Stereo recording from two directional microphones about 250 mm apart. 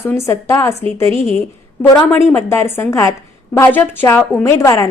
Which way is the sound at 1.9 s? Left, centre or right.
Centre.